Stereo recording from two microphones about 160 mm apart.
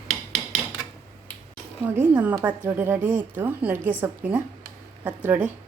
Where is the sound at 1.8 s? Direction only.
10° right (ahead or behind).